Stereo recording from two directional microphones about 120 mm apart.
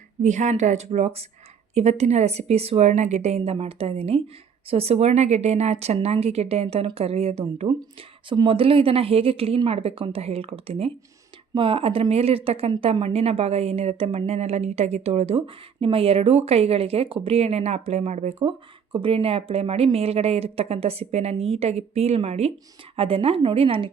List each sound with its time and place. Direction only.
0.2 s a woman's voice: 80° right; by 7.7 s 55° right (ahead or behind)
8.3 s a woman's voice: 45° right (ahead or behind); by 18.5 s 65° right (ahead or behind)
18.9 s a woman's voice: 45° right (ahead or behind)